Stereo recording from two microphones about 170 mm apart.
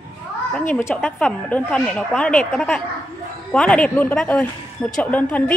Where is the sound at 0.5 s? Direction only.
10° left (ahead or behind).